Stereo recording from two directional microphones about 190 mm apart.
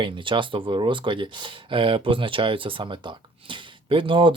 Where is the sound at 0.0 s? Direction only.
25° right (ahead or behind).